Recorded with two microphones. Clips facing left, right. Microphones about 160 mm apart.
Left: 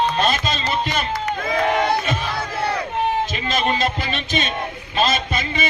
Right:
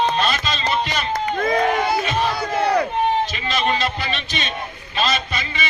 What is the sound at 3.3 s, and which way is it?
A man's voice, 45° left (ahead or behind).